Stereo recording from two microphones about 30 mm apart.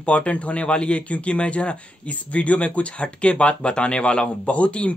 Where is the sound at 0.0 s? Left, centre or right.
Left.